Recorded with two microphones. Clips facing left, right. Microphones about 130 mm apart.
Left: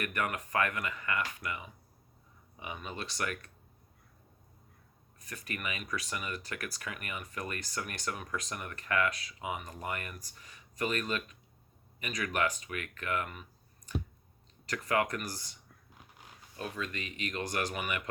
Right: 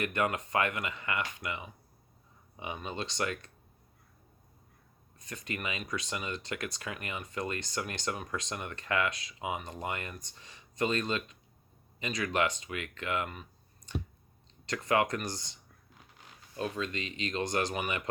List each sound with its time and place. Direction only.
0.0 s speech: 25° right (ahead or behind)
5.3 s speech: 25° right (ahead or behind)
16.6 s speech: 30° right (ahead or behind)